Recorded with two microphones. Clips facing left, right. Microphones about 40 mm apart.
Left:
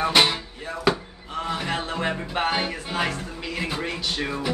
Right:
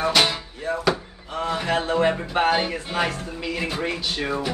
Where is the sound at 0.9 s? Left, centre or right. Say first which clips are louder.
Left 1 dB; centre.